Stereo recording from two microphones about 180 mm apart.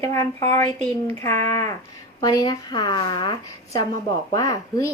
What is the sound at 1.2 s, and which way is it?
Speech, 15° left (ahead or behind).